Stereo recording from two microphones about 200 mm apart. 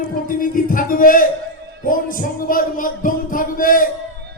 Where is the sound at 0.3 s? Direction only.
45° left (ahead or behind).